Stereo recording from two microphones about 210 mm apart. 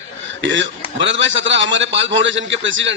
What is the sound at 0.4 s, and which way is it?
A man's voice, 60° right (ahead or behind).